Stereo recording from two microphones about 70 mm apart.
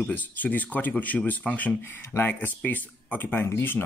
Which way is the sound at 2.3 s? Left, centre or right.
Left.